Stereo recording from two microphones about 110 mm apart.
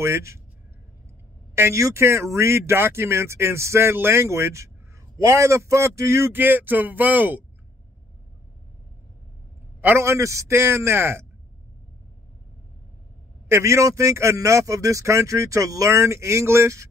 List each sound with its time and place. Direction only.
0.0 s a man's voice: 25° right (ahead or behind)
1.5 s a man's voice: 25° right (ahead or behind)
9.8 s a man's voice: 20° right (ahead or behind)
13.5 s a man's voice: 25° right (ahead or behind)